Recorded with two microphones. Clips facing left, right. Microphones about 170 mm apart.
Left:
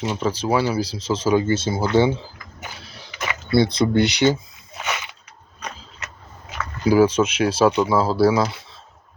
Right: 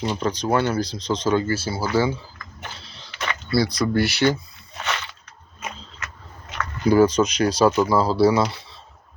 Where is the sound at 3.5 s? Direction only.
25° left (ahead or behind).